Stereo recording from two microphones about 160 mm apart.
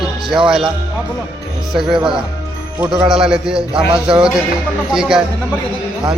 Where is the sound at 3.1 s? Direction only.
5° right (ahead or behind).